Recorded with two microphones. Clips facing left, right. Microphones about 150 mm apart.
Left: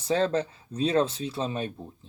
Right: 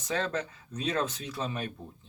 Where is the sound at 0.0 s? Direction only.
30° left (ahead or behind).